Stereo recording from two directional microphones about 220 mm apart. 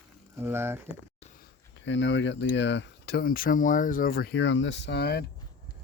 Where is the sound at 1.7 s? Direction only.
55° left (ahead or behind).